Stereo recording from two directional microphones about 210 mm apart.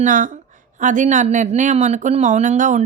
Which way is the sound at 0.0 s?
40° right (ahead or behind).